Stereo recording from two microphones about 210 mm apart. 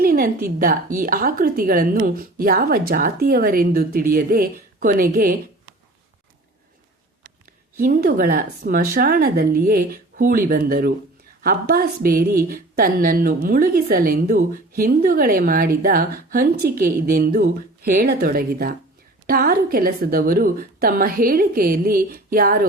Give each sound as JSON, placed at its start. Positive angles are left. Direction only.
{"t": 0.0, "sound": "a woman's voice", "side_deg": -45}
{"t": 7.8, "sound": "a woman's voice", "side_deg": -45}